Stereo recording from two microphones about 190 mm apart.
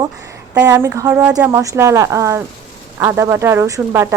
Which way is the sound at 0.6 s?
15° right (ahead or behind).